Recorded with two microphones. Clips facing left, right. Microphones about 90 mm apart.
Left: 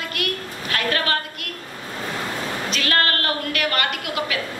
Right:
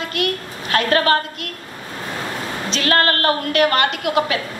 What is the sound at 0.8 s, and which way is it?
Speech, 40° right (ahead or behind).